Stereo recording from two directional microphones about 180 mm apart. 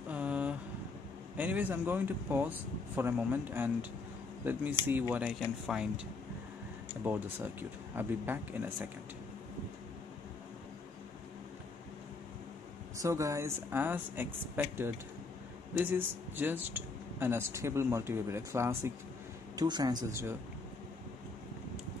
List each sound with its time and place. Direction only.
0.1 s vehicle: 5° right (ahead or behind)
1.3 s speech: 10° right (ahead or behind)
7.1 s speech: 10° right (ahead or behind)
13.0 s speech: 15° right (ahead or behind)